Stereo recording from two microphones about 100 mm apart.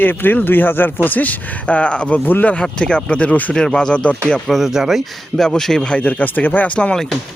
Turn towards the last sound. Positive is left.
turn(degrees=5)  # may be behind; listen again after turning